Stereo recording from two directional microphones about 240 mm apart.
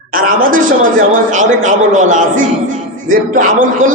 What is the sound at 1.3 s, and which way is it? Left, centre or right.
A man's voice, right.